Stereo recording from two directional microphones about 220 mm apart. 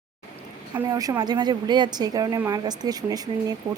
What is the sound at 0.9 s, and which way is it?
Speech, 15° right (ahead or behind).